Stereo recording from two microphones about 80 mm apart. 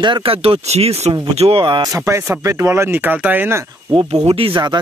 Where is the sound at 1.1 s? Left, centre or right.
Right.